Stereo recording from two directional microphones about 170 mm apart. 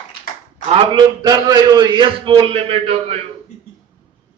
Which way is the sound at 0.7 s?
30° right (ahead or behind).